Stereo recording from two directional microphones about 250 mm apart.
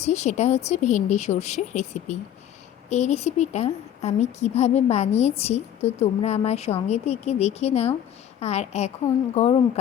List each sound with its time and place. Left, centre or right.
0.0 s a woman's voice: left